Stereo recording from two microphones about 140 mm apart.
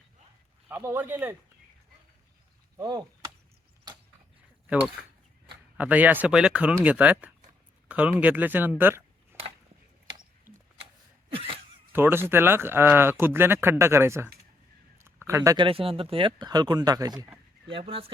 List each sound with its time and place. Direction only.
0.7 s speech: 15° right (ahead or behind)
2.7 s chop: 30° right (ahead or behind)
4.6 s speech: 10° right (ahead or behind)
11.3 s a sound: 40° right (ahead or behind)
11.9 s speech: 15° right (ahead or behind)
14.9 s a sound: 20° right (ahead or behind)
15.5 s speech: 40° right (ahead or behind)
17.2 s speech: 15° right (ahead or behind)
17.7 s speech: 40° right (ahead or behind)